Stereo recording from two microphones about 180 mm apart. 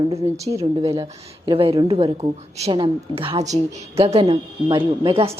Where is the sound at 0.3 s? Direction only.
15° right (ahead or behind).